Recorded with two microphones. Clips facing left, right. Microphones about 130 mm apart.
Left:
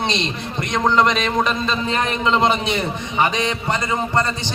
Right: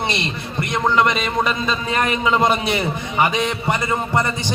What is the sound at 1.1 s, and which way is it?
A man's voice, 10° right (ahead or behind).